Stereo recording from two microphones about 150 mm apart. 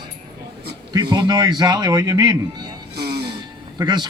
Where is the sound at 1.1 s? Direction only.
25° right (ahead or behind).